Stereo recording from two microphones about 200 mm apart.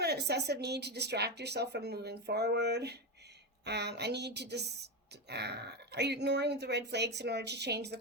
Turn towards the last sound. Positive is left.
turn(degrees=-55)  # may be behind; listen again after turning